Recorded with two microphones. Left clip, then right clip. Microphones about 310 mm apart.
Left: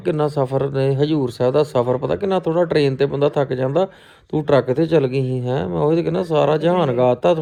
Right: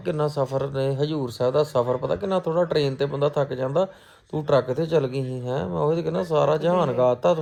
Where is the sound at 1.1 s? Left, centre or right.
Left.